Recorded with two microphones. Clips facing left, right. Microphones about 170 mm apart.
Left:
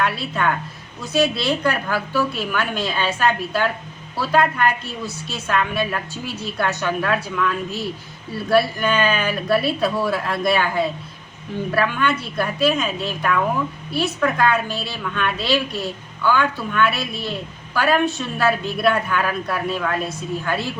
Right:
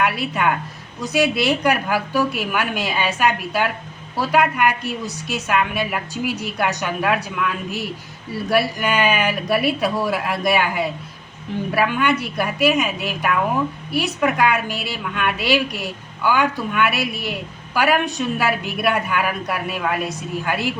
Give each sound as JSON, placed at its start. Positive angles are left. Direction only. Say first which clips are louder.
{"t": 0.0, "sound": "a woman's voice", "louder": "right 1 dB", "side_deg": -15}